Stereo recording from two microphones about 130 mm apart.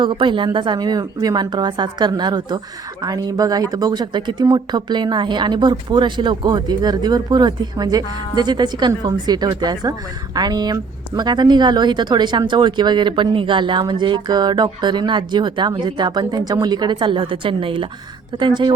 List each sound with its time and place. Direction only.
0.0 s speech: 35° right (ahead or behind)